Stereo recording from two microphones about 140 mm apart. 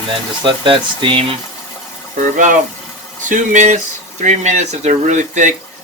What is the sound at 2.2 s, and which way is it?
Speech, 65° right (ahead or behind).